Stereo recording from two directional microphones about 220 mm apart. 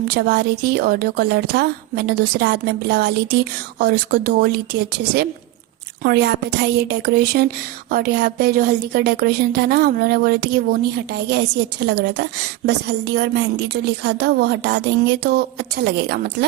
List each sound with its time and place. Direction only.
0.1 s speech: 45° right (ahead or behind)